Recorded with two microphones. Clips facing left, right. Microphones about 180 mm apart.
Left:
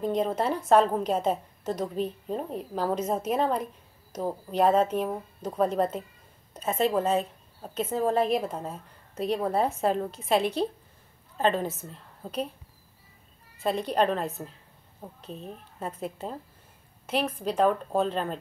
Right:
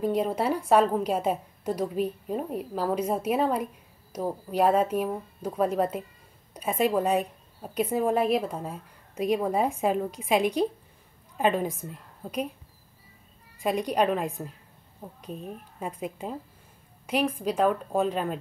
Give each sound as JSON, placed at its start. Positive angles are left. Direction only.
{"t": 0.0, "sound": "a woman's voice", "side_deg": -10}
{"t": 13.6, "sound": "a woman's voice", "side_deg": -10}